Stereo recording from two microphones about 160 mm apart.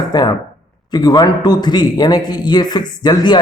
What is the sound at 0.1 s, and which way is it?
A man's voice, 25° left (ahead or behind).